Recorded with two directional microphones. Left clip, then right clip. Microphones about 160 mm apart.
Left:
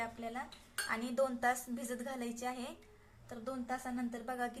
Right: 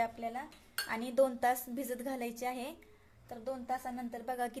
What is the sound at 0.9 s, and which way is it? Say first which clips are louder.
A woman's voice: right 5 dB; 30° right (ahead or behind).